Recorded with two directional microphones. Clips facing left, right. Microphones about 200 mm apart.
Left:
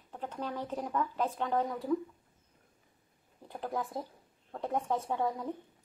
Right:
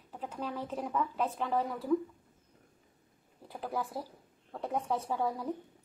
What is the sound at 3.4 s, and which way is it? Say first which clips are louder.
Speech: even; 5° right (ahead or behind).